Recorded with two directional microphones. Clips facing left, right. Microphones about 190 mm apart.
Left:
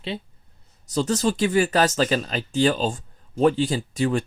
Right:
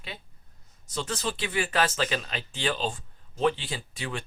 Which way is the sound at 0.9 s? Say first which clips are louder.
Left 10 dB; 40° left (ahead or behind).